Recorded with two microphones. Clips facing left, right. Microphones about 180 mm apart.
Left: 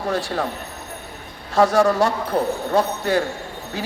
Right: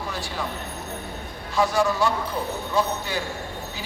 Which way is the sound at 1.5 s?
60° left (ahead or behind).